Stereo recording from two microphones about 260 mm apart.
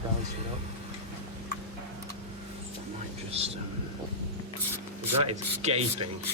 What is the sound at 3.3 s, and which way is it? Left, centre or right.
Speech, right.